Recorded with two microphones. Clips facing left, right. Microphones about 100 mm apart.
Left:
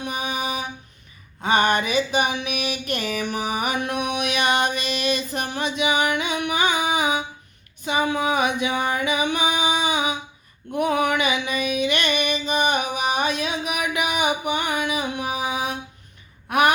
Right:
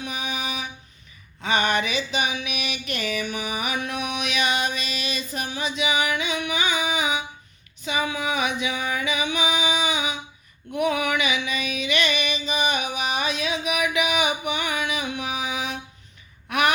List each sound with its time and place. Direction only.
0.0 s music: 45° left (ahead or behind)
1.4 s a sound: 45° left (ahead or behind)
3.3 s mantra: 45° left (ahead or behind)
7.9 s music: 40° left (ahead or behind)
10.7 s a sound: 40° left (ahead or behind)
11.4 s music: 45° left (ahead or behind)
16.5 s gasp: 40° left (ahead or behind)